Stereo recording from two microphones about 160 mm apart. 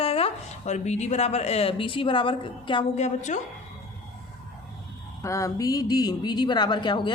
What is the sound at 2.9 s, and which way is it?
Speech, 50° left (ahead or behind).